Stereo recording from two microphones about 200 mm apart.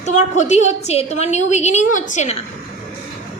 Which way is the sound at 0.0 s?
35° left (ahead or behind).